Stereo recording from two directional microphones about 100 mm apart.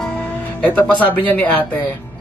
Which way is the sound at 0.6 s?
15° left (ahead or behind).